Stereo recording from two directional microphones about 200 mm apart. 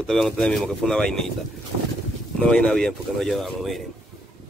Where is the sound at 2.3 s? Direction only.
5° left (ahead or behind).